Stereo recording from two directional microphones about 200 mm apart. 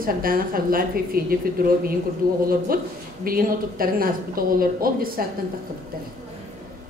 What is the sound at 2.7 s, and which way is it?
A woman's voice, 45° right (ahead or behind).